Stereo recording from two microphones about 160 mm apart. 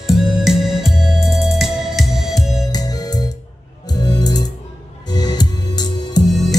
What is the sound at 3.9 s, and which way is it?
Music, 25° left (ahead or behind).